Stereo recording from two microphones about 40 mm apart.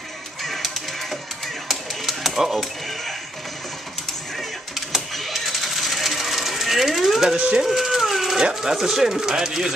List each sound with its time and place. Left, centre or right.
0.4 s music: centre
1.7 s typewriter: centre
5.1 s coin: centre
7.3 s speech: right
7.6 s a sound: centre
8.5 s speech: centre